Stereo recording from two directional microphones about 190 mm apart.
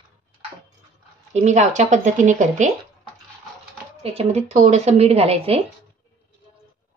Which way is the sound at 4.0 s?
35° right (ahead or behind).